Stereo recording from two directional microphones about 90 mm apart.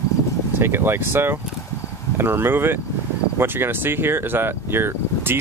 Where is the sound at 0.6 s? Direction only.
25° right (ahead or behind).